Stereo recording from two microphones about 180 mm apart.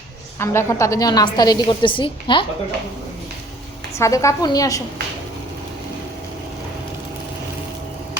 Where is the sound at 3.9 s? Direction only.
15° left (ahead or behind).